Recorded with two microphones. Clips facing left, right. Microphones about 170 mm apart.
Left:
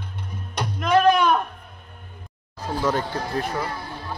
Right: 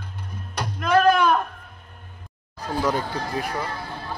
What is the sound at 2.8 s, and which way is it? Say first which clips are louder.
Speech: even; 15° right (ahead or behind).